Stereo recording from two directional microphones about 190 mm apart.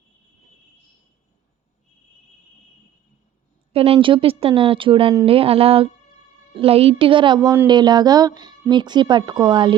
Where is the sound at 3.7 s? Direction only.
30° right (ahead or behind).